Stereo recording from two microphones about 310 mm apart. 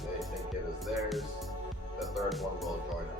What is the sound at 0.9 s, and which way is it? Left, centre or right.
Music, centre.